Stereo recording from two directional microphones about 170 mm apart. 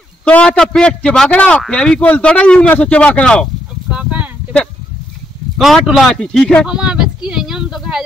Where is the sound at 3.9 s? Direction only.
10° right (ahead or behind).